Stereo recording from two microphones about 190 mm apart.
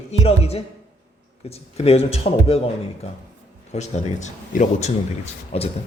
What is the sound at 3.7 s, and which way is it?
Speech, 40° left (ahead or behind).